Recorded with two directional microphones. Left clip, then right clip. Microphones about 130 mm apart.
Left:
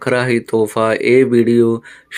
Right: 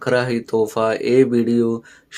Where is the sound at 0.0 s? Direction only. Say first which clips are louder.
Left 3 dB; 25° left (ahead or behind).